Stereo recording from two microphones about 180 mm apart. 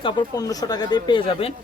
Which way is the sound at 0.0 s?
20° left (ahead or behind).